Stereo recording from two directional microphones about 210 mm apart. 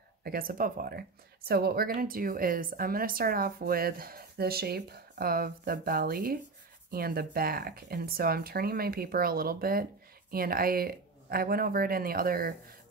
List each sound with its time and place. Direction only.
0.2 s speech: 45° right (ahead or behind)